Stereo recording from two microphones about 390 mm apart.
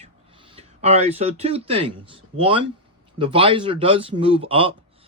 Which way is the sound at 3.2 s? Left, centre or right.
Centre.